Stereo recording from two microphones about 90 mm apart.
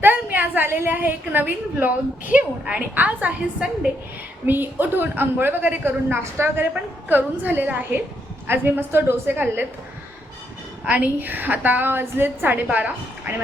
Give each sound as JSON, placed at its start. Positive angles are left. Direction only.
{"t": 0.0, "sound": "a woman's voice", "side_deg": -20}
{"t": 10.8, "sound": "a woman's voice", "side_deg": -20}